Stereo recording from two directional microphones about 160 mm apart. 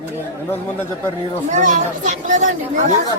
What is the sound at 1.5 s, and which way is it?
Speech, 50° right (ahead or behind).